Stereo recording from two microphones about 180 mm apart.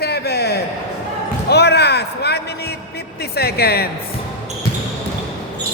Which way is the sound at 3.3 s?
60° left (ahead or behind).